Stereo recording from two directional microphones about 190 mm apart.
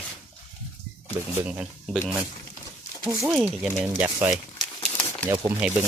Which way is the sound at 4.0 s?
10° right (ahead or behind).